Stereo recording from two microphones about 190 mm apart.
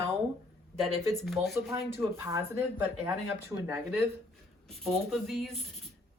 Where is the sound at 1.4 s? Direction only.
30° right (ahead or behind).